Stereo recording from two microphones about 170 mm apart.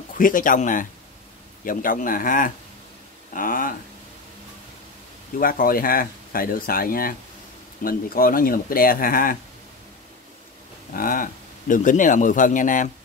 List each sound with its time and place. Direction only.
0.2 s speech: 50° left (ahead or behind)
5.4 s speech: 55° left (ahead or behind)
10.9 s speech: 55° left (ahead or behind)